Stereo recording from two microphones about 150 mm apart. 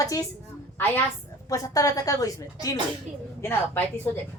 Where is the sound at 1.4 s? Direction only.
20° left (ahead or behind).